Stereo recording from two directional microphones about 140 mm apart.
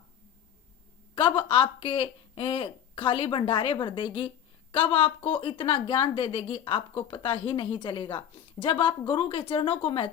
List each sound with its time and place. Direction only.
1.4 s a woman's voice: 40° left (ahead or behind)